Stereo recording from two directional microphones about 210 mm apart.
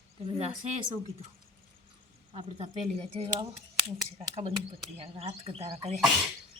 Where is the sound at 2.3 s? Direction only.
35° right (ahead or behind).